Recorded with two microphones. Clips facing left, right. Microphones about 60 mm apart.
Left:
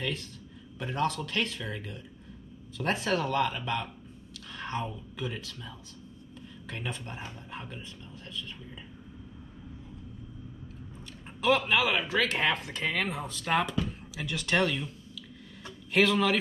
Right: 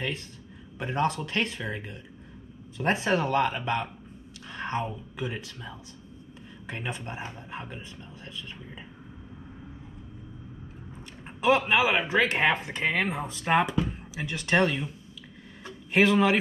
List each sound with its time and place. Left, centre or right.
0.7 s speech: right
11.4 s speech: right
15.9 s speech: right